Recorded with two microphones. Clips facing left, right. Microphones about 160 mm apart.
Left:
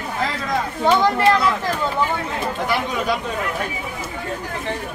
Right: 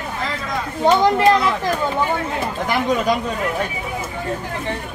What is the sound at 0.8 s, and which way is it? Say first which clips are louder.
Speech: right 3 dB; 20° right (ahead or behind).